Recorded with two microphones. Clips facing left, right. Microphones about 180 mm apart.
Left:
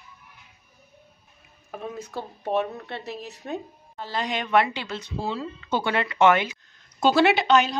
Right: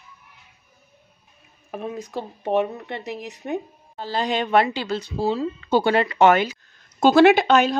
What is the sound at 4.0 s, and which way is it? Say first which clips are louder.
Speech: right 5 dB; 30° right (ahead or behind).